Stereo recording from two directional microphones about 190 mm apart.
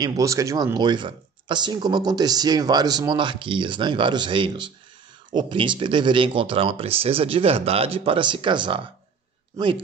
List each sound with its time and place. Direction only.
0.0 s speech: 15° right (ahead or behind)